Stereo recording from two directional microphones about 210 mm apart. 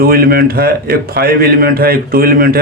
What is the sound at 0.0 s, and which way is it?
A man's voice, 45° right (ahead or behind).